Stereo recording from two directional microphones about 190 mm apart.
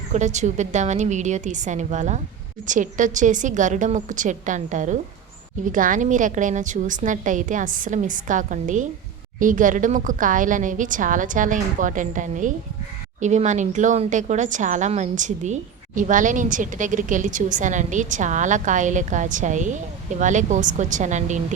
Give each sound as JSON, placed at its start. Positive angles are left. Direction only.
{"t": 0.1, "sound": "a woman's voice", "side_deg": -40}